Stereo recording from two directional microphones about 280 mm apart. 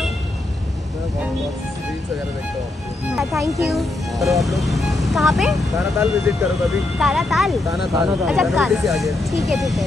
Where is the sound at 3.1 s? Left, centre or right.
Centre.